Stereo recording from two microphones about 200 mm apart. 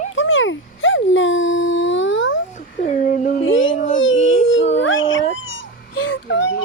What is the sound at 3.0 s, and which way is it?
Speech, 40° left (ahead or behind).